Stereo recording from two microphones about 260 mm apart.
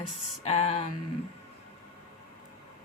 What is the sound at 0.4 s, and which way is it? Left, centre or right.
Speech, left.